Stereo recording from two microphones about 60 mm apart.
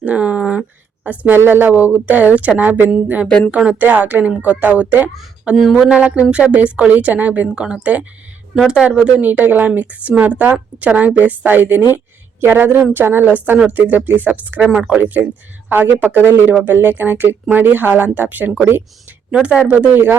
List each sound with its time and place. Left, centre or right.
0.0 s a sound: right
1.0 s a woman's voice: right
3.5 s a woman's voice: centre
5.7 s a woman's voice: centre
7.4 s speech: centre
9.1 s a woman's voice: right
14.7 s a woman's voice: centre
19.3 s a woman's voice: centre